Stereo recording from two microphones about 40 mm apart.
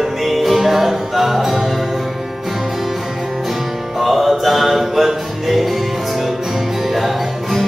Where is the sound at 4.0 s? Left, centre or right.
Centre.